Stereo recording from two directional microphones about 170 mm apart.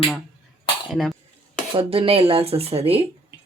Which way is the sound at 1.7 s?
30° right (ahead or behind).